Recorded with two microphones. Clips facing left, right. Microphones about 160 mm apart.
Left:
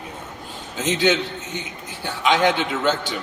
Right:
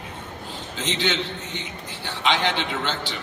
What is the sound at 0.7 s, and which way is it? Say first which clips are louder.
A man's voice: left 6 dB; 45° left (ahead or behind).